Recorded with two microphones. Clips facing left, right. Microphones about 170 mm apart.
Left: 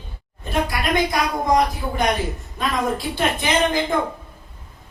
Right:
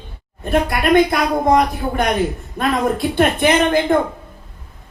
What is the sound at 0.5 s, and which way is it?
A woman's voice, 55° right (ahead or behind).